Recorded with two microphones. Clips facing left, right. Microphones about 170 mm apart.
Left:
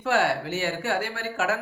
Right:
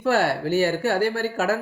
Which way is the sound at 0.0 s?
40° right (ahead or behind).